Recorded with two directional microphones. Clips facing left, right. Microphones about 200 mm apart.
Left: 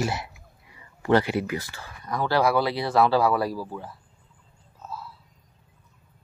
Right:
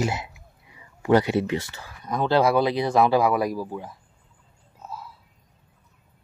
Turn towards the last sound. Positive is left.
turn(degrees=-15)  # may be behind; listen again after turning